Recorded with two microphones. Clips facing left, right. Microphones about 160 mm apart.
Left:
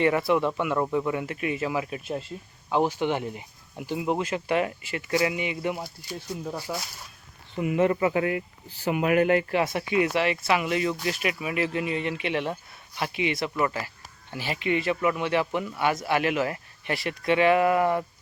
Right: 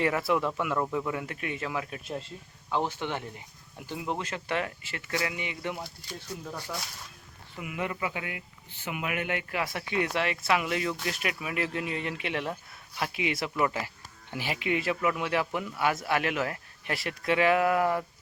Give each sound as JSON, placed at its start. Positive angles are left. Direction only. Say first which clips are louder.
{"t": 0.0, "sound": "speech", "louder": "left 4 dB", "side_deg": 0}
{"t": 6.7, "sound": "speech", "louder": "left 4 dB", "side_deg": 25}
{"t": 7.5, "sound": "speech", "louder": "left 11 dB", "side_deg": 35}
{"t": 9.9, "sound": "speech", "louder": "left 4 dB", "side_deg": 5}
{"t": 13.7, "sound": "speech", "louder": "left 1 dB", "side_deg": -15}